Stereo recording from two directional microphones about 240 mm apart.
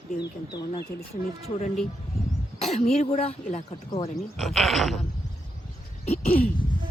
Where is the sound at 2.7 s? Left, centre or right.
Left.